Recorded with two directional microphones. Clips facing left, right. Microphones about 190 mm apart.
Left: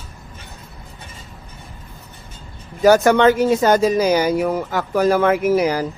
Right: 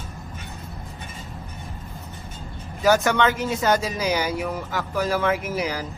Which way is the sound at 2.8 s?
45° left (ahead or behind).